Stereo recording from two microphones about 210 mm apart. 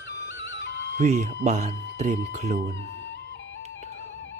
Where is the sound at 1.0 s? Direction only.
35° right (ahead or behind).